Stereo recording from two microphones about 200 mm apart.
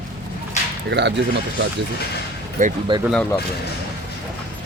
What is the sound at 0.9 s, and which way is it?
Speech, 60° right (ahead or behind).